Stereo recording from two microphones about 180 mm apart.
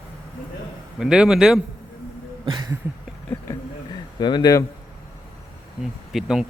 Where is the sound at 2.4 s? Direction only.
25° right (ahead or behind).